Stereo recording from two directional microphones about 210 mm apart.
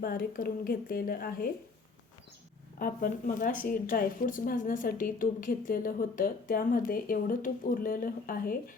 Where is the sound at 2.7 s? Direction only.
45° left (ahead or behind).